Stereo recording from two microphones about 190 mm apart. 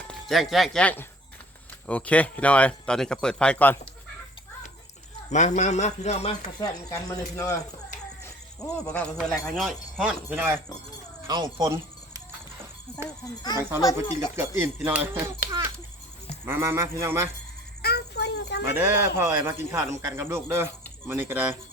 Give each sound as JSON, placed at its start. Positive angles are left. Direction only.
{"t": 0.1, "sound": "speech", "side_deg": 0}
{"t": 5.3, "sound": "a man's voice", "side_deg": 40}
{"t": 6.6, "sound": "speech", "side_deg": 20}
{"t": 8.9, "sound": "speech", "side_deg": 5}
{"t": 13.1, "sound": "speech", "side_deg": 20}
{"t": 13.6, "sound": "speech", "side_deg": -10}
{"t": 16.5, "sound": "speech", "side_deg": -15}
{"t": 17.8, "sound": "a sound", "side_deg": 60}
{"t": 18.7, "sound": "speech", "side_deg": -10}